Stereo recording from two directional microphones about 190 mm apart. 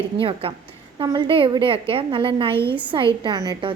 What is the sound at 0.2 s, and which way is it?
A woman's voice, 30° right (ahead or behind).